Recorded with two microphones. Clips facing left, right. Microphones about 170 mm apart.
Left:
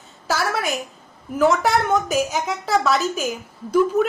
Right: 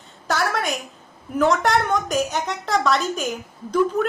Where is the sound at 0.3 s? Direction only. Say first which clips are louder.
Even; 5° left (ahead or behind).